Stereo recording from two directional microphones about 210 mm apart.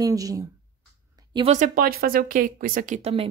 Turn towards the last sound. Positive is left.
turn(degrees=-30)  # may be behind; listen again after turning